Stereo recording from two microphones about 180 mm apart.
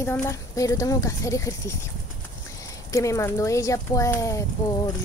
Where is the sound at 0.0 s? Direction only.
15° left (ahead or behind).